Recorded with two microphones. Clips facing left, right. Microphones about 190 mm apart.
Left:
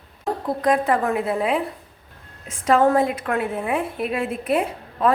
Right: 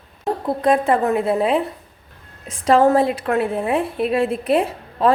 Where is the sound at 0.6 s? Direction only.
25° right (ahead or behind).